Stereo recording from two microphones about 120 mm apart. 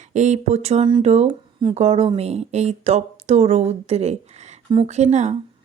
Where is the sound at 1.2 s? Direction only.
45° right (ahead or behind).